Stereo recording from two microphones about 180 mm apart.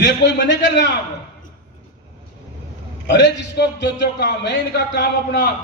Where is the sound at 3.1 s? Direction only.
70° left (ahead or behind).